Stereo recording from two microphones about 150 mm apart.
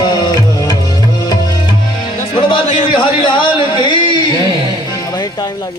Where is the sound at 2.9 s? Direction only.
30° left (ahead or behind).